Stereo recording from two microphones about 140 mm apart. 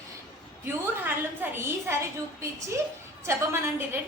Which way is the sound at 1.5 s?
20° right (ahead or behind).